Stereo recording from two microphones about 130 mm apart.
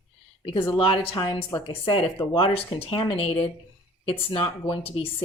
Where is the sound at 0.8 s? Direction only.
40° left (ahead or behind).